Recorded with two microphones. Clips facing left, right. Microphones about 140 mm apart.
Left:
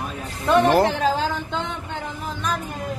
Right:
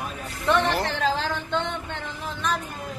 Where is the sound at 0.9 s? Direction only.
10° left (ahead or behind).